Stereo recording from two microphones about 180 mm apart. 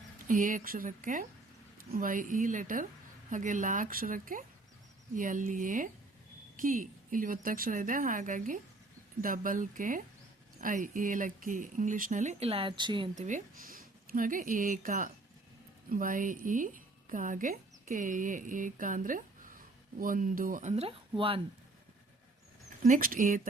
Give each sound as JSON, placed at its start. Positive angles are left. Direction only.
{"t": 0.3, "sound": "speech", "side_deg": -45}
{"t": 13.1, "sound": "speech", "side_deg": -45}
{"t": 22.8, "sound": "speech", "side_deg": -50}